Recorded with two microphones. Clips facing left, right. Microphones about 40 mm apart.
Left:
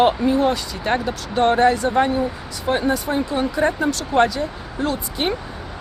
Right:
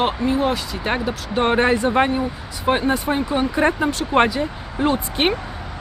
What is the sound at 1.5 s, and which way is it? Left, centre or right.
Speech, right.